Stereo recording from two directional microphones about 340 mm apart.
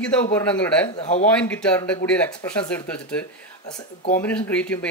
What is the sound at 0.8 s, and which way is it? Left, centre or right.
Speech, centre.